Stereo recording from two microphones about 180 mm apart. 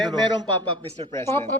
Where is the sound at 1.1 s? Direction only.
15° left (ahead or behind).